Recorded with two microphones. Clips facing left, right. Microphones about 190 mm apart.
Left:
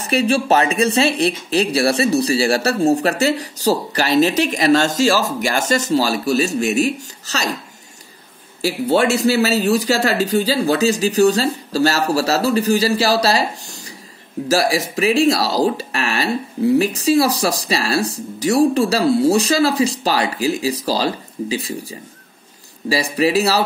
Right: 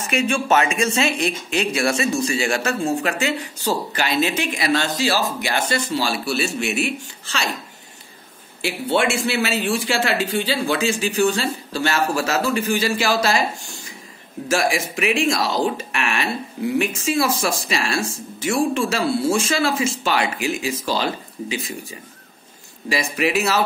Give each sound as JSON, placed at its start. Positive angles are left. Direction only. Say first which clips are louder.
{"t": 0.0, "sound": "speech", "louder": "left 4 dB", "side_deg": 35}
{"t": 8.5, "sound": "speech", "louder": "left 4 dB", "side_deg": 40}